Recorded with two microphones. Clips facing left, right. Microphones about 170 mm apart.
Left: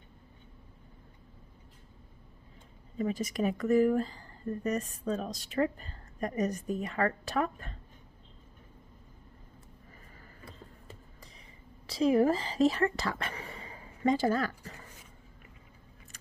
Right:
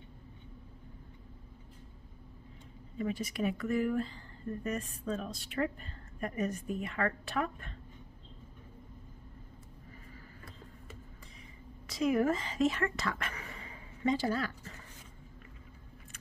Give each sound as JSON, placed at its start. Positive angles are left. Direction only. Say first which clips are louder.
{"t": 3.0, "sound": "a woman's voice", "louder": "left 3 dB", "side_deg": 40}
{"t": 11.9, "sound": "speech", "louder": "left 4 dB", "side_deg": 30}
{"t": 14.0, "sound": "speech", "louder": "left 4 dB", "side_deg": 45}